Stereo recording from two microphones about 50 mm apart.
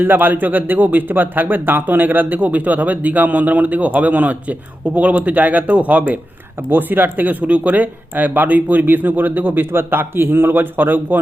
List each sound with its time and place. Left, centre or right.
0.0 s speech: right
6.6 s speech: right